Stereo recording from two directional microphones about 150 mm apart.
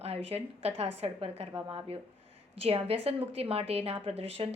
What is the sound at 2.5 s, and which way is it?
A woman's voice, 40° right (ahead or behind).